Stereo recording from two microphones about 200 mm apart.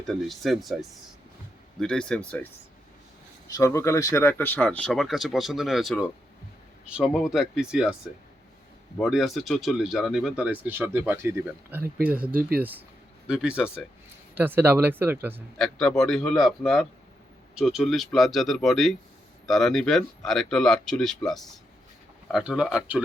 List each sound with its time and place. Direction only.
0.1 s speech: centre (ahead or behind)
3.6 s speech: 15° left (ahead or behind); by 7.9 s 5° right (ahead or behind)
9.0 s speech: centre (ahead or behind)
12.4 s speech: 50° right (ahead or behind)
13.2 s speech: 5° right (ahead or behind)
15.5 s speech: 5° left (ahead or behind)